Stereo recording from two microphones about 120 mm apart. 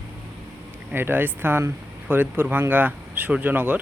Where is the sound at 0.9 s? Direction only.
15° right (ahead or behind).